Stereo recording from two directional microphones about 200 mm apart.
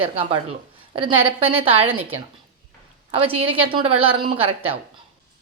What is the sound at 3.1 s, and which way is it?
Speech, 30° right (ahead or behind).